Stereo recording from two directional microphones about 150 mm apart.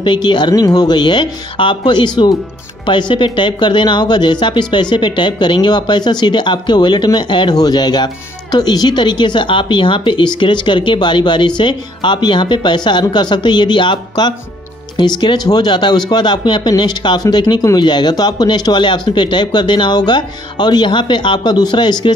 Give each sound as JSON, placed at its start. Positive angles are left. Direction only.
{"t": 0.0, "sound": "speech", "side_deg": 30}